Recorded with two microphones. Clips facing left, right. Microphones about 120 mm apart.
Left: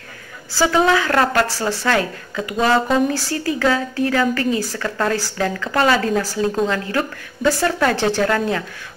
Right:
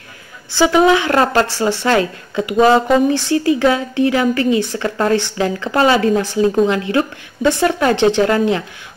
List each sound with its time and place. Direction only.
0.6 s a woman's voice: 20° right (ahead or behind)